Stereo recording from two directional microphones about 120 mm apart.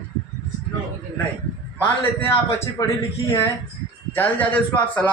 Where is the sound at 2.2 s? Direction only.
20° left (ahead or behind).